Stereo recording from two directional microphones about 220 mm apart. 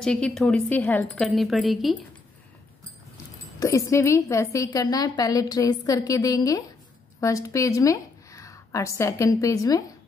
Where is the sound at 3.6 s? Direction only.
15° left (ahead or behind).